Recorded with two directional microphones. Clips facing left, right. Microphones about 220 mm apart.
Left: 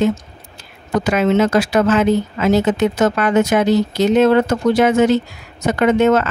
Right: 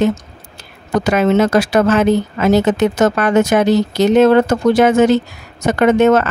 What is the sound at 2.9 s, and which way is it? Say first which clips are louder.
Speech: right 2 dB; 45° right (ahead or behind).